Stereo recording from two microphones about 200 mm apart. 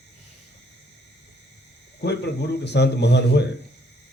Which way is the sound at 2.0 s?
55° left (ahead or behind).